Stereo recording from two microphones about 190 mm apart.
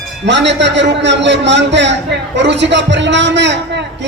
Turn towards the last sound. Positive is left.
turn(degrees=-65)  # may be behind; listen again after turning